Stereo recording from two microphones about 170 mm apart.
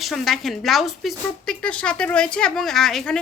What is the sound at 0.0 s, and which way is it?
A woman's voice, centre (ahead or behind).